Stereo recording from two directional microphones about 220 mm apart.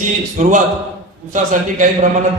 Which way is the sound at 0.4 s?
35° right (ahead or behind).